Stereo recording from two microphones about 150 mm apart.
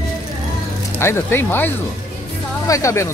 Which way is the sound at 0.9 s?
15° left (ahead or behind).